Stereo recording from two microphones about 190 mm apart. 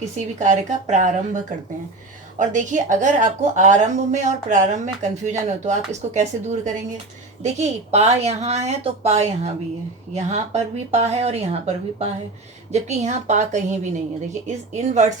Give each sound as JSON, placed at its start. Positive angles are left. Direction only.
{"t": 0.0, "sound": "a woman's voice", "side_deg": -40}
{"t": 2.4, "sound": "a woman's voice", "side_deg": -40}